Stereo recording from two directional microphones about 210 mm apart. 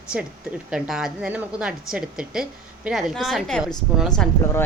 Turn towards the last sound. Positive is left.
turn(degrees=5)  # may be behind; listen again after turning